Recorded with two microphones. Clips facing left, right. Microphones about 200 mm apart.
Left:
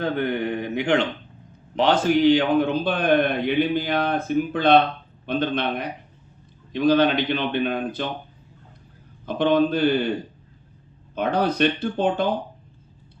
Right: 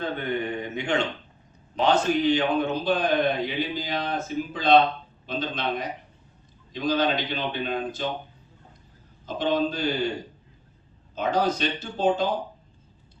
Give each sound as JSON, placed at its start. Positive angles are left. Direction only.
{"t": 0.0, "sound": "speech", "side_deg": 90}
{"t": 9.2, "sound": "speech", "side_deg": 60}
{"t": 11.1, "sound": "speech", "side_deg": 60}